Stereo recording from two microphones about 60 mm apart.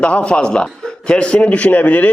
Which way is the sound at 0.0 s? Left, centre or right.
Centre.